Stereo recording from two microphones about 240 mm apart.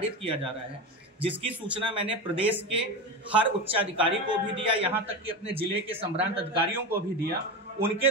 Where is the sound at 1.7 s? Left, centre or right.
Right.